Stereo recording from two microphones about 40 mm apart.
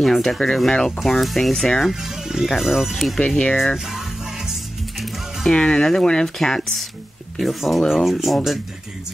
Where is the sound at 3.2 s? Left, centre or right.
Left.